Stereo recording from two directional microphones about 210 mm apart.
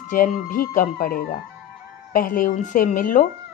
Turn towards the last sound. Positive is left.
turn(degrees=40)  # may be behind; listen again after turning